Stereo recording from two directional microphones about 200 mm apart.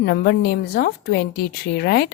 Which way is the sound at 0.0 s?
55° left (ahead or behind).